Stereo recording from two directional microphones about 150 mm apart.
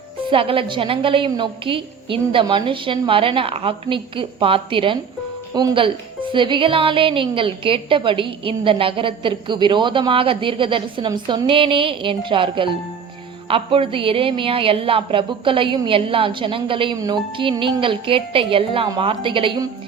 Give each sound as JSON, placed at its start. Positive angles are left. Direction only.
{"t": 0.3, "sound": "a woman's voice", "side_deg": -35}